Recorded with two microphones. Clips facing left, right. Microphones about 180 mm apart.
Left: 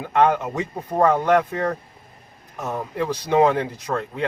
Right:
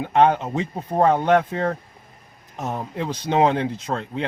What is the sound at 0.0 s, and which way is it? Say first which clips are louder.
A man's voice: right 1 dB; 20° right (ahead or behind).